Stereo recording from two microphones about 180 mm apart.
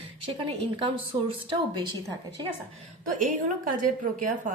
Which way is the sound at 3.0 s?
50° right (ahead or behind).